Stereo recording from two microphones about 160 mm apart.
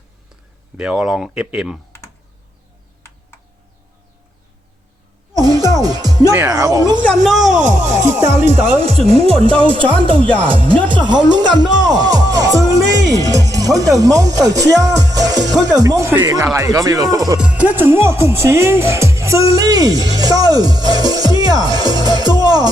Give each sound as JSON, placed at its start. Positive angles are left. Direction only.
{"t": 0.8, "sound": "speech", "side_deg": 0}
{"t": 5.3, "sound": "music", "side_deg": -25}
{"t": 6.3, "sound": "speech", "side_deg": -20}
{"t": 7.5, "sound": "speech", "side_deg": -50}
{"t": 8.8, "sound": "speech", "side_deg": -40}
{"t": 17.4, "sound": "speech", "side_deg": -10}